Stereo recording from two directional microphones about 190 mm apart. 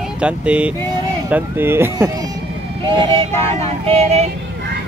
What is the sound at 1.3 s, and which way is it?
Speech, 10° right (ahead or behind).